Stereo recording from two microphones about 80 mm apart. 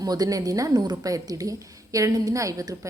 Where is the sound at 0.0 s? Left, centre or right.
Right.